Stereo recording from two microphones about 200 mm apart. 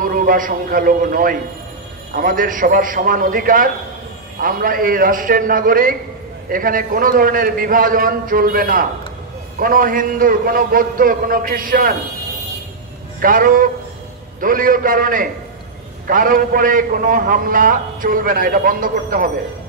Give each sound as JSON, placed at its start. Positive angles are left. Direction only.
{"t": 0.0, "sound": "a man's voice", "side_deg": -45}
{"t": 13.2, "sound": "a man's voice", "side_deg": -45}